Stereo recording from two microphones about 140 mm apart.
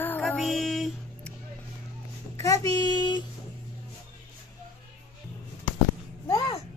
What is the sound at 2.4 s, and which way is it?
Speech, 25° left (ahead or behind).